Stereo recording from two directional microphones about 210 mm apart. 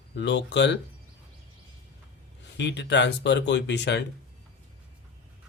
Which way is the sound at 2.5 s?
55° left (ahead or behind).